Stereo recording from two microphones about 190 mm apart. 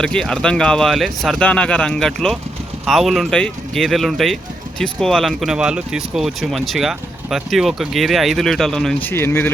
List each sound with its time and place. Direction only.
0.0 s speech: 5° left (ahead or behind)